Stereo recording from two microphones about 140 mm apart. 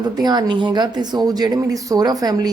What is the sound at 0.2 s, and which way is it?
A woman's voice, 30° right (ahead or behind).